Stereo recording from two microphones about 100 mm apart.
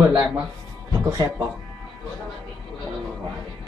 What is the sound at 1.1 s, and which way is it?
Speech, 30° right (ahead or behind).